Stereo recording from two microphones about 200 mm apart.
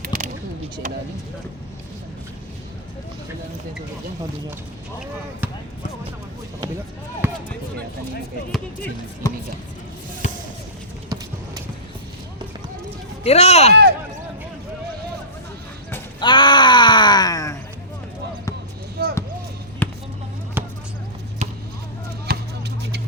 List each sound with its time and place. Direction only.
0.0 s a sound: 45° right (ahead or behind)
7.2 s basketball bounce: 10° right (ahead or behind)
9.2 s speech: 15° left (ahead or behind)
13.2 s speech: 30° left (ahead or behind)
16.2 s groan: 25° left (ahead or behind)
19.0 s basketball bounce: 50° right (ahead or behind)
19.8 s basketball bounce: 10° left (ahead or behind)
20.6 s basketball bounce: 10° right (ahead or behind)
22.3 s a sound: 50° right (ahead or behind)